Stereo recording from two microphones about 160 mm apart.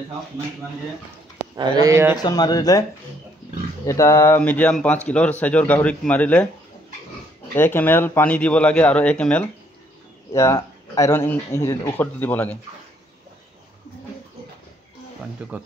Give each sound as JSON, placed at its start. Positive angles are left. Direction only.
{"t": 1.6, "sound": "speech", "side_deg": -25}
{"t": 2.2, "sound": "speech", "side_deg": 25}
{"t": 3.8, "sound": "speech", "side_deg": 20}
{"t": 7.5, "sound": "speech", "side_deg": 15}
{"t": 10.3, "sound": "speech", "side_deg": 20}
{"t": 15.4, "sound": "speech", "side_deg": -5}